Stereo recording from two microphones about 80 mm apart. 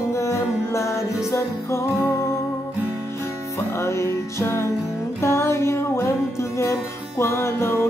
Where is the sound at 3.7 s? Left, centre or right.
Left.